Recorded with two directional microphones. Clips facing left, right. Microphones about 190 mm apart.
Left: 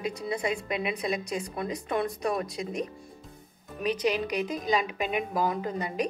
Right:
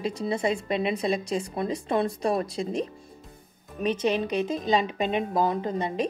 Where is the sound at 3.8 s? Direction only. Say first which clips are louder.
Right 2 dB; 25° right (ahead or behind).